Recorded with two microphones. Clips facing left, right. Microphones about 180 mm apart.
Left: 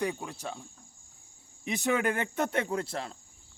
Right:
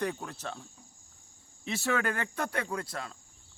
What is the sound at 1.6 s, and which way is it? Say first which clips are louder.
Speech: left 2 dB; 15° left (ahead or behind).